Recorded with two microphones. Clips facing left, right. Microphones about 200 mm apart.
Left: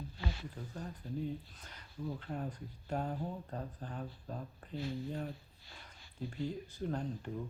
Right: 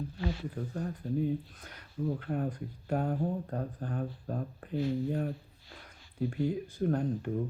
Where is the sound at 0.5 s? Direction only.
50° right (ahead or behind).